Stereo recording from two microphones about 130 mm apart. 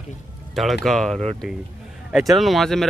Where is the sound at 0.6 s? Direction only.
Centre (ahead or behind).